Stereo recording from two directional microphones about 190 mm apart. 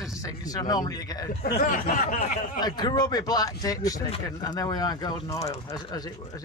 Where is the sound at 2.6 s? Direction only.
20° left (ahead or behind).